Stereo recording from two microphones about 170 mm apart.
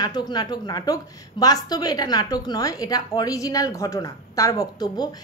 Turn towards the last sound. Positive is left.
turn(degrees=25)  # may be behind; listen again after turning